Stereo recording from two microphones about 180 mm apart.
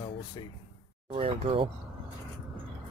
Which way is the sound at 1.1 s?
35° right (ahead or behind).